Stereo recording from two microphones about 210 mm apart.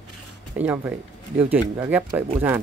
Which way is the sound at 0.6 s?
5° right (ahead or behind).